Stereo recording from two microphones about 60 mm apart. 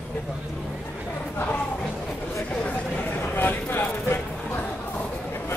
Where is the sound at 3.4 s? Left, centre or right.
Left.